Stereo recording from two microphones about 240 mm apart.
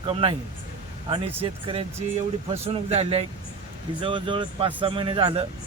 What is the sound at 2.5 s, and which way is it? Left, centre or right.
A man's voice, right.